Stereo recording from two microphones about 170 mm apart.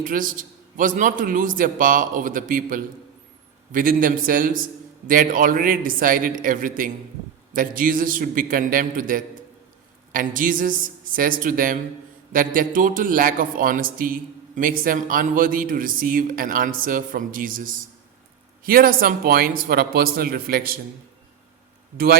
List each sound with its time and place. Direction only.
0.0 s a man's voice: 55° right (ahead or behind)
21.9 s a man's voice: 65° right (ahead or behind)